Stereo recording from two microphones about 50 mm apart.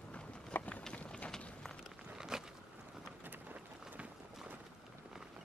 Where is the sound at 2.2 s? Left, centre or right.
Centre.